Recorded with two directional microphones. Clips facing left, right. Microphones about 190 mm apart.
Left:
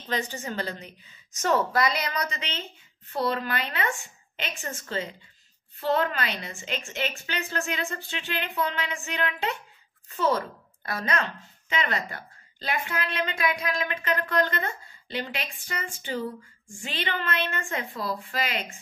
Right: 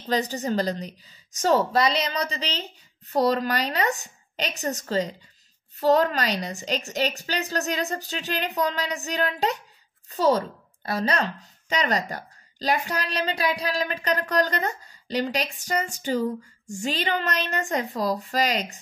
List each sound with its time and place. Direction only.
0.0 s a woman's voice: 40° right (ahead or behind)